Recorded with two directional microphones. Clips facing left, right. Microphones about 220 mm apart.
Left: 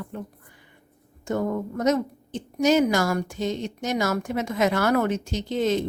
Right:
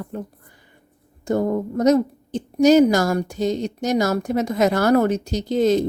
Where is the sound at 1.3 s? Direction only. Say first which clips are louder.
Right 5 dB; 35° right (ahead or behind).